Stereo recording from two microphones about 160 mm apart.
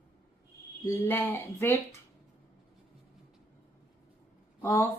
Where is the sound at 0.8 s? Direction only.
10° left (ahead or behind).